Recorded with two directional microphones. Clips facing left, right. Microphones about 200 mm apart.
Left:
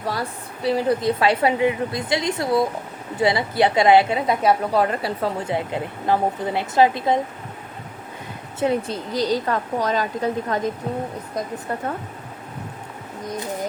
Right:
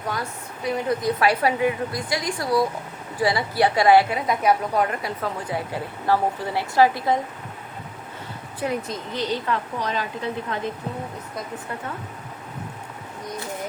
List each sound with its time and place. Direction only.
0.0 s a woman's voice: 30° left (ahead or behind)
8.5 s a woman's voice: 25° left (ahead or behind)
9.1 s a woman's voice: 40° left (ahead or behind)